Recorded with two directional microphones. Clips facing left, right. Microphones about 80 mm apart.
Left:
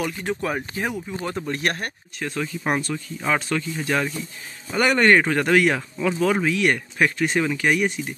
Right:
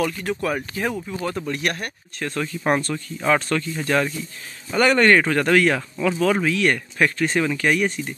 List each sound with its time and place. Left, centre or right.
0.0 s speech: left
2.1 s speech: centre